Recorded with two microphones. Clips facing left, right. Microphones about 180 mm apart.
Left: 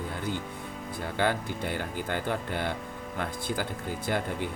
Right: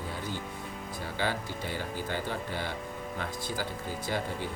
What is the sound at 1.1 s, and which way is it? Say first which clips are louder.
Speech: left 5 dB; 55° left (ahead or behind).